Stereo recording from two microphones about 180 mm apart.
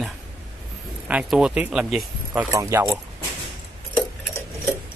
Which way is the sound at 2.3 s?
15° right (ahead or behind).